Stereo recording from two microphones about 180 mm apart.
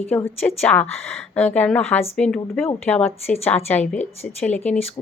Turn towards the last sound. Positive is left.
turn(degrees=10)  # may be behind; listen again after turning